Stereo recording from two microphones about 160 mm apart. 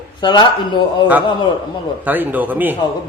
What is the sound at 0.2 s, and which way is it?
Speech, 30° left (ahead or behind).